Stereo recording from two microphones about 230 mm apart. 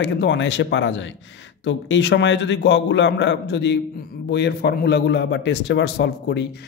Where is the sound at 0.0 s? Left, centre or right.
Left.